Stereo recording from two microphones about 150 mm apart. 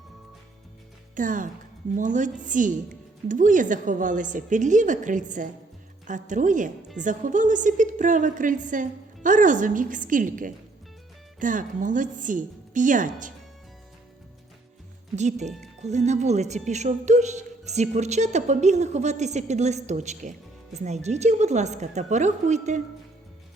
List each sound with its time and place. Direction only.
1.1 s a woman's voice: 60° right (ahead or behind)
15.1 s a woman's voice: 50° right (ahead or behind)